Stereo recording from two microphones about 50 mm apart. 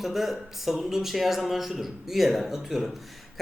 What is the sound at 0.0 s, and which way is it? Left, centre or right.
Speech, centre.